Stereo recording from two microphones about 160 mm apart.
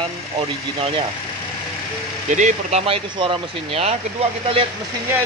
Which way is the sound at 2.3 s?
50° right (ahead or behind).